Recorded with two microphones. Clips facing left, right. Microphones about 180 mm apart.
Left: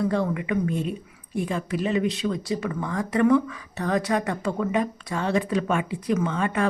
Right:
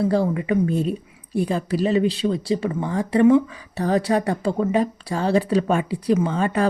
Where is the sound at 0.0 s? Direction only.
30° right (ahead or behind).